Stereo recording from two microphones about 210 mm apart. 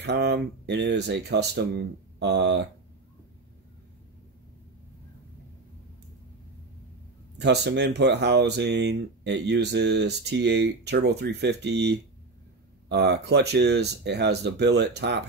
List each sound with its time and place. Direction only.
0.0 s speech: 55° right (ahead or behind)
7.3 s speech: 50° right (ahead or behind)